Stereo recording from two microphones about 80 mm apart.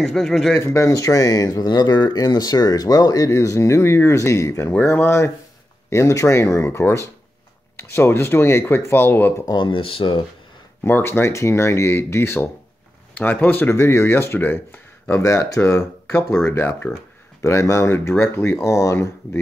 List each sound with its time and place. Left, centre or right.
0.0 s speech: centre
0.6 s speech: left
9.6 s speech: left
10.8 s speech: left